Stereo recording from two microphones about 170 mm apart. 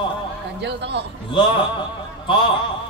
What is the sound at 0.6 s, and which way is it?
Speech, 80° right.